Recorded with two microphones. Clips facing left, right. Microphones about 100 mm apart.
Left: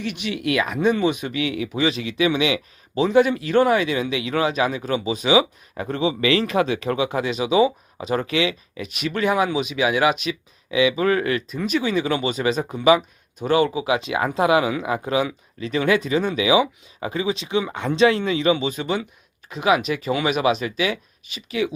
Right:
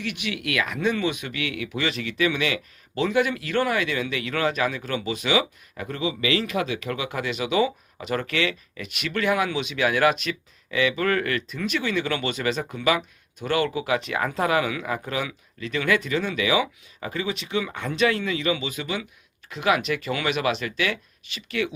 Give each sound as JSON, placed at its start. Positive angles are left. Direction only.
{"t": 0.0, "sound": "speech", "side_deg": 25}
{"t": 19.5, "sound": "speech", "side_deg": 20}